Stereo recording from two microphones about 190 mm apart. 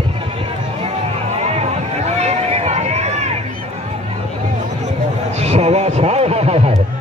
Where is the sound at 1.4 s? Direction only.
35° right (ahead or behind).